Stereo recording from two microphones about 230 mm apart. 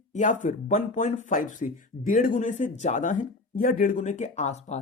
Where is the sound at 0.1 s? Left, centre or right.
Left.